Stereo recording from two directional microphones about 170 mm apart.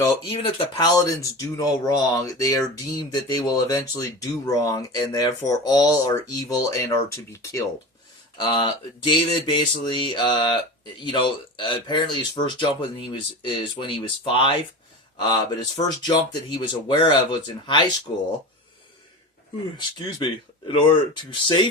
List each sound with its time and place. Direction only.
0.0 s speech: 30° left (ahead or behind)
8.4 s speech: 30° left (ahead or behind)
20.0 s speech: 25° left (ahead or behind)